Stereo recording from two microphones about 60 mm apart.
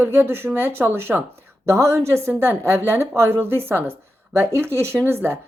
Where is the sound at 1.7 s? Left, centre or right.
Right.